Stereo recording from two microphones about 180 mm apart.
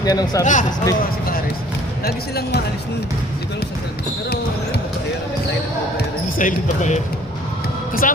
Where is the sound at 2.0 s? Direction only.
60° left (ahead or behind).